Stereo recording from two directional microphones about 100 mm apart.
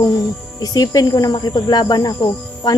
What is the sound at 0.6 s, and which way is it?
Speech, 40° left (ahead or behind).